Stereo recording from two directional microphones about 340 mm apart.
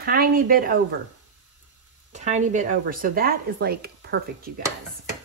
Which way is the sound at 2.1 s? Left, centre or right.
Centre.